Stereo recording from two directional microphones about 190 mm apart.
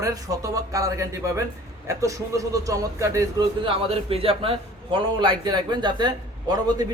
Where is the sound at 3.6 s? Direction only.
30° right (ahead or behind).